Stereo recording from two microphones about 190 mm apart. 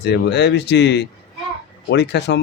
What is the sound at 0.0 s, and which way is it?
Speech, 60° left (ahead or behind).